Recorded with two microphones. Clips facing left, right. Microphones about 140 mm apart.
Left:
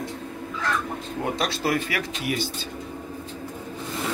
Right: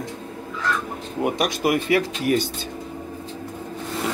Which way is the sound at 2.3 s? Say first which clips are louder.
Right 7 dB; 45° right (ahead or behind).